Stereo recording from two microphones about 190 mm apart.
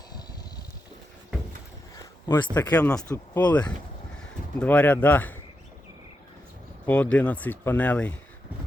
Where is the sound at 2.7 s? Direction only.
5° left (ahead or behind).